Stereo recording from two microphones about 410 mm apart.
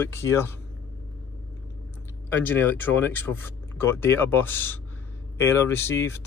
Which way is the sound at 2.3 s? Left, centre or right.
Centre.